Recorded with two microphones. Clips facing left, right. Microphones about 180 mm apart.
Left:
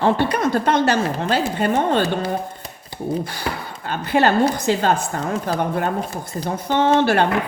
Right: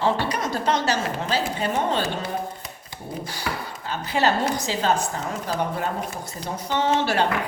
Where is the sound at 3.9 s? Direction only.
60° left (ahead or behind).